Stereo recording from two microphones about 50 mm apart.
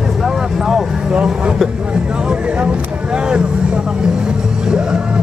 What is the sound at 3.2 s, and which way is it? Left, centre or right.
Vehicle, centre.